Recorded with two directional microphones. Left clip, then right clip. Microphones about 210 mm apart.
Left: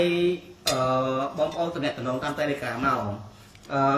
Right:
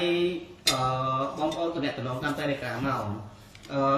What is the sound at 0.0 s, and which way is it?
Mantra, centre (ahead or behind).